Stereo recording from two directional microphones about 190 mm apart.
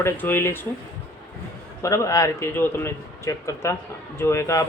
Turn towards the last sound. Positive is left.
turn(degrees=15)  # may be behind; listen again after turning